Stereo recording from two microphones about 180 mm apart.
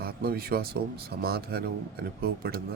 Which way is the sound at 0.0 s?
60° right (ahead or behind).